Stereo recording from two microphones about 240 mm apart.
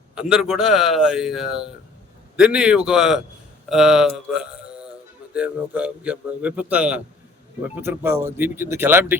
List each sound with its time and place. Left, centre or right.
0.2 s a man's voice: centre